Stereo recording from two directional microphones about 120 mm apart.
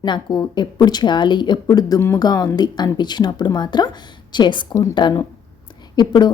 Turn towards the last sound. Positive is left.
turn(degrees=40)  # may be behind; listen again after turning